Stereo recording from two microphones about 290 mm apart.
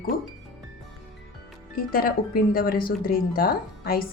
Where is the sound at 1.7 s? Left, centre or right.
Left.